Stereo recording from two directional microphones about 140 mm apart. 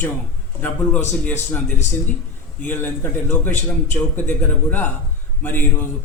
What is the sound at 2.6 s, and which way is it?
A man's voice, 15° left (ahead or behind).